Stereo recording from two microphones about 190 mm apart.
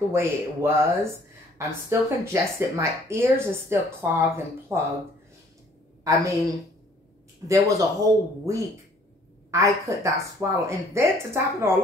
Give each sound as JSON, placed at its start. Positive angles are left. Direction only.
{"t": 0.1, "sound": "speech", "side_deg": -15}
{"t": 6.0, "sound": "speech", "side_deg": -15}